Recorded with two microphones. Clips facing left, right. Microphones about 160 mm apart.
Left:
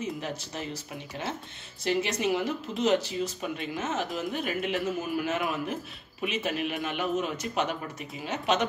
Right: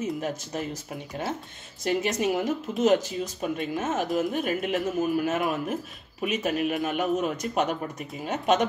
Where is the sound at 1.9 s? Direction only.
45° right (ahead or behind).